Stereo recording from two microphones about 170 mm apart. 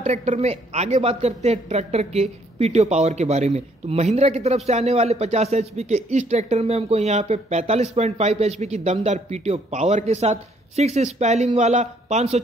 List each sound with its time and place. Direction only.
0.0 s speech: 45° right (ahead or behind)